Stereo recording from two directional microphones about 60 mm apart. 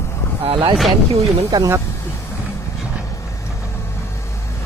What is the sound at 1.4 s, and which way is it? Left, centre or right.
Speech, right.